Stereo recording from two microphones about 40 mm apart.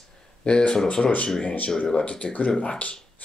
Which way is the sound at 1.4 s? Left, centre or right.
Left.